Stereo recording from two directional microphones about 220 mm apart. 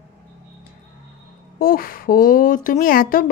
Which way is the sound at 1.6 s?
40° left (ahead or behind).